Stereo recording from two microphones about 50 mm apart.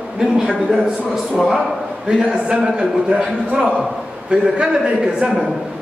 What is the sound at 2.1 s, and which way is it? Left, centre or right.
A man's voice, centre.